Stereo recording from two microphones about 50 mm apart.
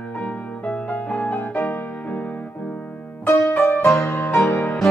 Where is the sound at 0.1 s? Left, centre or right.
Left.